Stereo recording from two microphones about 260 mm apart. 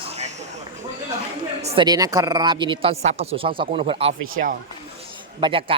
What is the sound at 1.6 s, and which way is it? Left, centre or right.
A woman's voice, right.